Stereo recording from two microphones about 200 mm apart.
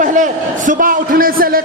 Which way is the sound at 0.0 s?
40° right (ahead or behind).